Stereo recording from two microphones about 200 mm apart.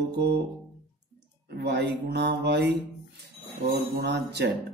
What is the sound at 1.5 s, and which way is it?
A man's voice, 55° right (ahead or behind).